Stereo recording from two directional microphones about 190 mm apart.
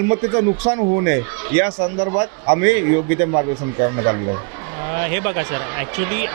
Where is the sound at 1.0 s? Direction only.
15° right (ahead or behind).